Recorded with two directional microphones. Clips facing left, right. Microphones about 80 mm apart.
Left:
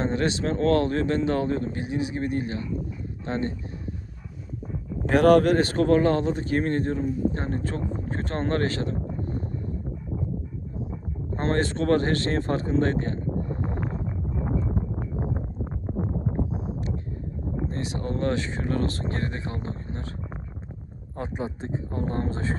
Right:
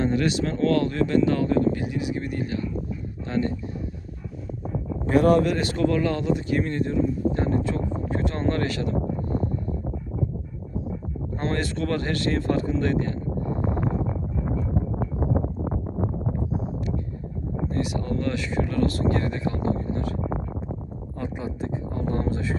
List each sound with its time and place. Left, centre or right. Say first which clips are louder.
0.0 s speech: right 2 dB; left
5.0 s speech: left 2 dB; left
5.4 s speech: left 1 dB; left
11.3 s speech: left 3 dB; left
17.7 s speech: right 5 dB; left
19.9 s vehicle: right 8 dB; left
21.2 s a sound: right 1 dB; left